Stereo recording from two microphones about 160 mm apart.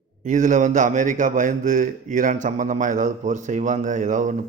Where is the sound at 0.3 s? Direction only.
50° right (ahead or behind).